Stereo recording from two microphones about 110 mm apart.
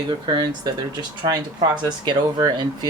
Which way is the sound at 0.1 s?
40° right (ahead or behind).